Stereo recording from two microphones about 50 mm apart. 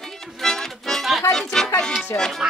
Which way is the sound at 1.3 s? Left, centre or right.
Centre.